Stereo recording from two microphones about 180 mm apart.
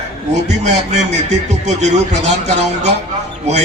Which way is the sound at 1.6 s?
40° right (ahead or behind).